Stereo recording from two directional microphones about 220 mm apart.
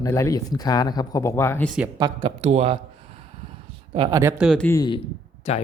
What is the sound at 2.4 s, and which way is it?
Speech, 30° right (ahead or behind).